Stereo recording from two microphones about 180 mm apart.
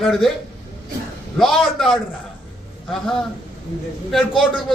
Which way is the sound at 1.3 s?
Centre (ahead or behind).